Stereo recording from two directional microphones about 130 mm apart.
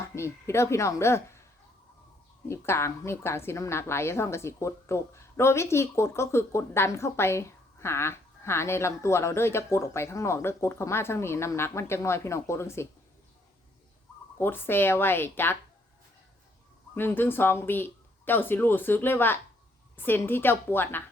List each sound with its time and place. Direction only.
0.2 s a woman's voice: 20° left (ahead or behind)
2.5 s a woman's voice: 20° left (ahead or behind)
14.3 s speech: 15° left (ahead or behind)
16.9 s speech: 15° left (ahead or behind)